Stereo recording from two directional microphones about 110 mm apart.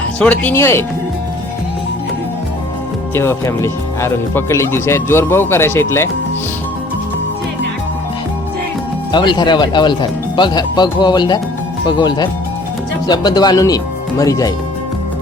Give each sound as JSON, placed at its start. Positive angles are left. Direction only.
{"t": 0.2, "sound": "speech", "side_deg": 15}
{"t": 3.2, "sound": "speech", "side_deg": 25}
{"t": 9.1, "sound": "speech", "side_deg": 45}